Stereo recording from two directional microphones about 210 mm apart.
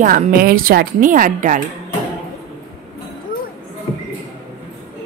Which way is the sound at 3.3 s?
45° left (ahead or behind).